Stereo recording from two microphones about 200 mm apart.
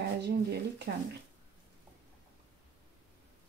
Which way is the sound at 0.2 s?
55° right (ahead or behind).